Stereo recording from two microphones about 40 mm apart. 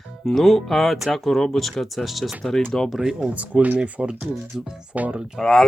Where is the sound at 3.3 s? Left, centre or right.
Right.